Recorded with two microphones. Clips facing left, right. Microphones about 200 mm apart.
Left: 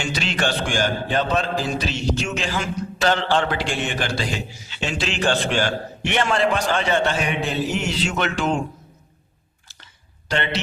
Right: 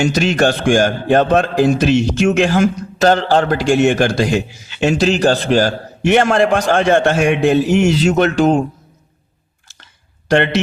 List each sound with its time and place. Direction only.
0.0 s a man's voice: 45° right (ahead or behind)
3.0 s a man's voice: 40° right (ahead or behind)
10.2 s a man's voice: 50° right (ahead or behind)